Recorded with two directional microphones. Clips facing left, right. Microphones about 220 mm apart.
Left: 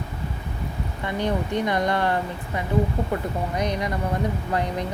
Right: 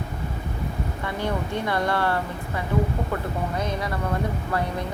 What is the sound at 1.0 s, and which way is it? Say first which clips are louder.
Speech: left 3 dB; 20° left (ahead or behind).